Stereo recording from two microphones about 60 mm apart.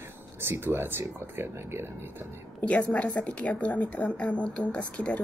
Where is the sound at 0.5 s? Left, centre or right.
Right.